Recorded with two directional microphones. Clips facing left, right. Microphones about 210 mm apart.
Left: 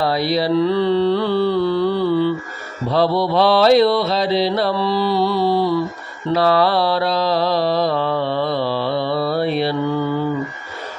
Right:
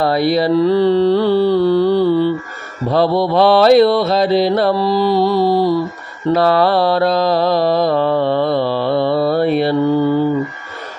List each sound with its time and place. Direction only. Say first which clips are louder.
0.0 s mantra: right 4 dB; 50° right (ahead or behind)